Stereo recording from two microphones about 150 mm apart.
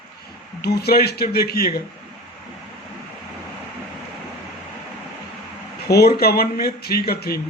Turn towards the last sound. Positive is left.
turn(degrees=90)